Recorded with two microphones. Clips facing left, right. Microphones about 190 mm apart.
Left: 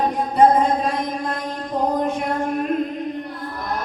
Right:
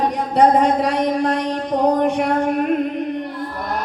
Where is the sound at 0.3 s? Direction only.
75° right (ahead or behind).